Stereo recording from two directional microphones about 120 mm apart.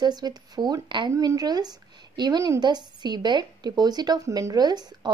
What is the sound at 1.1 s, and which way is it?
A woman's voice, 30° right (ahead or behind).